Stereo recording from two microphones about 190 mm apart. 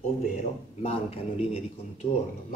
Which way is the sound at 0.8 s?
30° left (ahead or behind).